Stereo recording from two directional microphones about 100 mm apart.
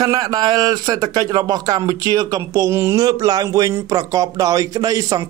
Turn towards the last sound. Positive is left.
turn(degrees=-35)  # may be behind; listen again after turning